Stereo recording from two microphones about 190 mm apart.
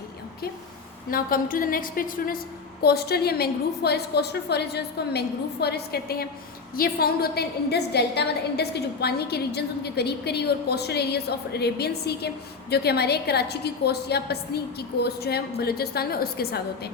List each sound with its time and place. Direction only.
1.1 s a woman's voice: 50° left (ahead or behind)